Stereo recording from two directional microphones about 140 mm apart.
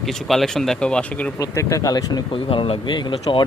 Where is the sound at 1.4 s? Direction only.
20° left (ahead or behind).